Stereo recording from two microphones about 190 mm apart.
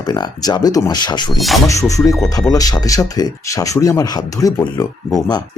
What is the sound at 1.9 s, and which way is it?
Speech, 15° left (ahead or behind).